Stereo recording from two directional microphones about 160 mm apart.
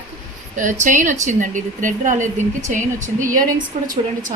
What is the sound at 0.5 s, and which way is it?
Speech, 55° right (ahead or behind).